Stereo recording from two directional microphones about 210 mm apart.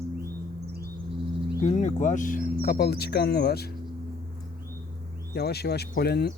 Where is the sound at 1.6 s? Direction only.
30° left (ahead or behind); by 3.7 s 50° left (ahead or behind).